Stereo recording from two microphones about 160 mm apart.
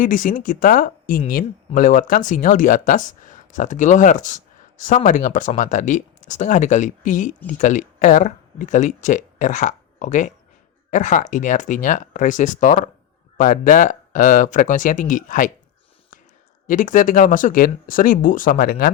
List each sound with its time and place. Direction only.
0.0 s speech: 55° left (ahead or behind)
16.6 s speech: 55° left (ahead or behind)